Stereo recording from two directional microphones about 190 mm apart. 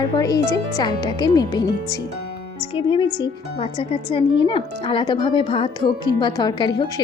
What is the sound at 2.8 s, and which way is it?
Speech, 25° left (ahead or behind).